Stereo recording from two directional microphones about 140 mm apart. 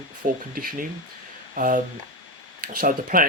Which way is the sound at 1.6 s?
80° right.